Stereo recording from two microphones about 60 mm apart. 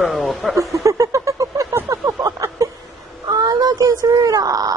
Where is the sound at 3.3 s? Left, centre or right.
Right.